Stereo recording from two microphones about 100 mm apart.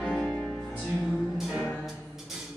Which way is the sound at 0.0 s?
5° left (ahead or behind).